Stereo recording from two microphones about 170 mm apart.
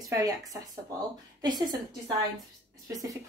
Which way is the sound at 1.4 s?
25° right (ahead or behind).